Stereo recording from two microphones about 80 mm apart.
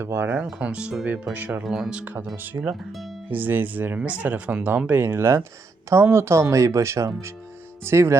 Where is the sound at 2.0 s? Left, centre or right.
Right.